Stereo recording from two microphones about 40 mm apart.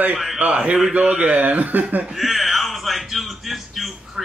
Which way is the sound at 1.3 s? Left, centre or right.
Right.